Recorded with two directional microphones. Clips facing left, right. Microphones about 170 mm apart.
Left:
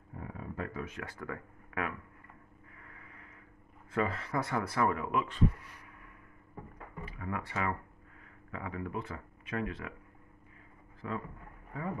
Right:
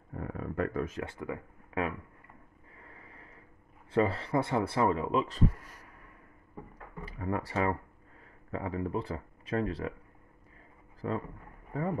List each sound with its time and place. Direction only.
0.1 s a sound: 60° right (ahead or behind)
1.2 s speech: 20° right (ahead or behind)
2.8 s vehicle: 30° right (ahead or behind)
3.9 s speech: 30° right (ahead or behind)
7.1 s speech: 35° right (ahead or behind)
11.0 s speech: 35° right (ahead or behind)